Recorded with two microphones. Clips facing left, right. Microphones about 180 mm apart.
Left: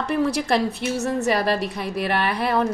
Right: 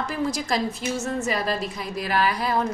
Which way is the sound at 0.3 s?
65° left (ahead or behind).